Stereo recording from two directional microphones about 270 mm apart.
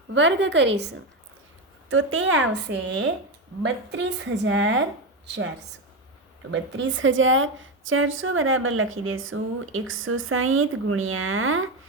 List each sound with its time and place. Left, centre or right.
0.1 s a woman's voice: right
4.4 s a woman's voice: right